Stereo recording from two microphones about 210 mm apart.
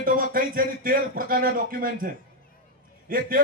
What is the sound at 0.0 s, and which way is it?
A man's voice, 40° right (ahead or behind).